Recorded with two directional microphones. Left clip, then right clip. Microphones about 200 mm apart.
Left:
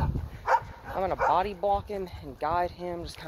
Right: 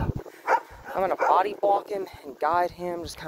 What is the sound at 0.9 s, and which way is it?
Speech, 50° right (ahead or behind).